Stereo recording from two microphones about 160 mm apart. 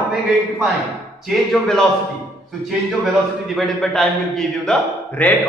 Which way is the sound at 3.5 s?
Centre (ahead or behind).